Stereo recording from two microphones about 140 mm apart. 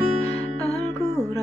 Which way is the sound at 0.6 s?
25° right (ahead or behind).